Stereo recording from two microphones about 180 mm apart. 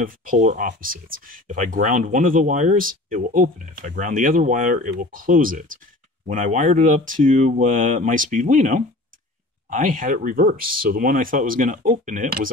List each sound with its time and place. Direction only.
0.0 s speech: 50° right (ahead or behind)